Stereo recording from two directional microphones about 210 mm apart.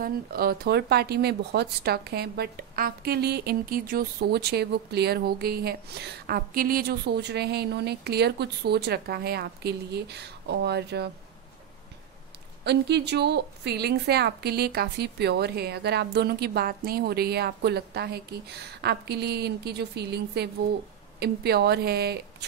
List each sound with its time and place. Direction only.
0.0 s speech: 45° right (ahead or behind)
12.6 s speech: 50° right (ahead or behind)